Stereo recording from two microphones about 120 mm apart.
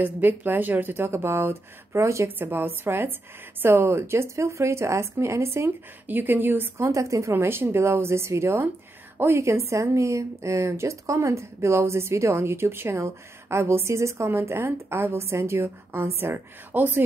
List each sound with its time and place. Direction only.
0.0 s speech: 15° right (ahead or behind)